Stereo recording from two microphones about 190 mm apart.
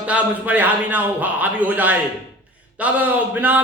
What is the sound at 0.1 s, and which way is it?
Speech, 10° right (ahead or behind).